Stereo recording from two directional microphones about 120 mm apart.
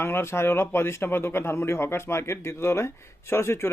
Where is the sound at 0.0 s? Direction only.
20° left (ahead or behind).